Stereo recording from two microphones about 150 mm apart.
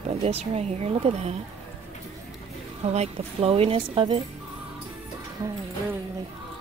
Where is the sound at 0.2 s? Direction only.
45° right (ahead or behind).